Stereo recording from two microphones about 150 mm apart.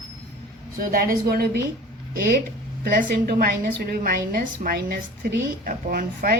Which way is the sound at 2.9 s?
80° right.